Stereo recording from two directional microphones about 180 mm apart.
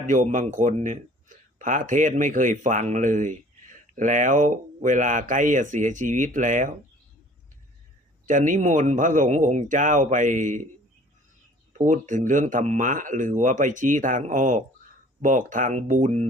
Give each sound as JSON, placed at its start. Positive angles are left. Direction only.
{"t": 0.0, "sound": "speech", "side_deg": -45}
{"t": 8.3, "sound": "speech", "side_deg": -45}
{"t": 11.8, "sound": "speech", "side_deg": -45}